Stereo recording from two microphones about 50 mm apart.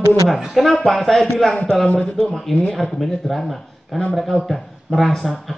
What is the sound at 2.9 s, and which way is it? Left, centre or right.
Speech, centre.